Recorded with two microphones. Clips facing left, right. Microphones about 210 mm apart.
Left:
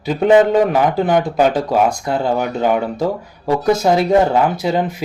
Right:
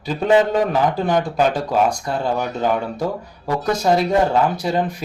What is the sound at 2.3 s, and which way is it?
Speech, 5° left (ahead or behind).